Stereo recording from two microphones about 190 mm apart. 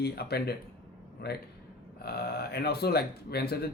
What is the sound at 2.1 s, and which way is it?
Speech, 55° left (ahead or behind).